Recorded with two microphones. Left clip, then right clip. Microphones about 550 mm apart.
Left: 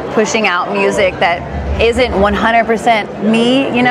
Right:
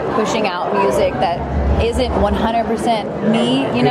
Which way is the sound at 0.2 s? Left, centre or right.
Left.